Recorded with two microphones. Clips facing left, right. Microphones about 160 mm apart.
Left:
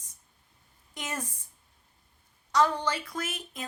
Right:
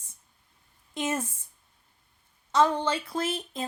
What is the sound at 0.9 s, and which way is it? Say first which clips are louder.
Speech: right 7 dB; 25° right (ahead or behind).